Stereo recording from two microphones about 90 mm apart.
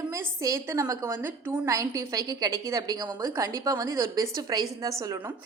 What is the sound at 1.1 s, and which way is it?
Speech, 25° right (ahead or behind).